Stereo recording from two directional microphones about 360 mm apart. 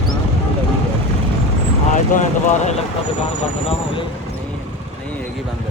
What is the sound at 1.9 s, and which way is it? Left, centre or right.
Speech, left.